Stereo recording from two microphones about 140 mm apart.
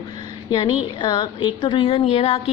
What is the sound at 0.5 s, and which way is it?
A woman's voice, 35° left (ahead or behind).